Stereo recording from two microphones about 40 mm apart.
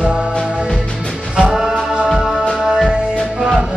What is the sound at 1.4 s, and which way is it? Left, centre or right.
Music, centre.